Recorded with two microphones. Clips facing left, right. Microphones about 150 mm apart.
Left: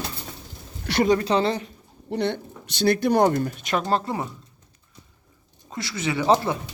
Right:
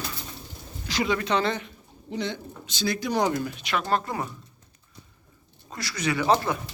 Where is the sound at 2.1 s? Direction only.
60° left (ahead or behind); by 3.8 s 45° left (ahead or behind).